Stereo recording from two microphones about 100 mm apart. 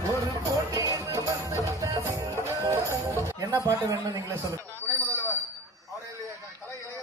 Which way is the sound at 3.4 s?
35° right (ahead or behind).